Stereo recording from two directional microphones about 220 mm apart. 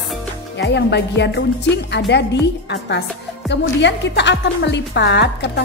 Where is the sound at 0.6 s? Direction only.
50° left (ahead or behind).